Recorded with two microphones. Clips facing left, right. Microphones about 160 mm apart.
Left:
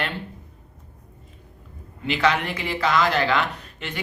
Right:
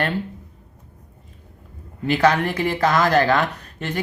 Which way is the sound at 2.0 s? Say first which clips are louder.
Right 4 dB; 45° right (ahead or behind).